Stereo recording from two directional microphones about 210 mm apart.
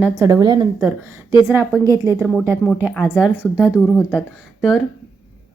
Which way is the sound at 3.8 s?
10° left (ahead or behind).